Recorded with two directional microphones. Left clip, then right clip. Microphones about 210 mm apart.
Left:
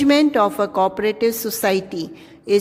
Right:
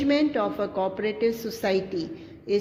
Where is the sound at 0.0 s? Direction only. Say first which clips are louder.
Left 8 dB; 50° left (ahead or behind).